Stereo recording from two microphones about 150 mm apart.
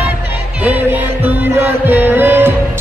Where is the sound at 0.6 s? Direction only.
10° right (ahead or behind).